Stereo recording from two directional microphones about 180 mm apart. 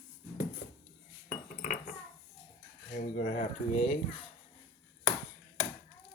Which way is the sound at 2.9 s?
55° left (ahead or behind).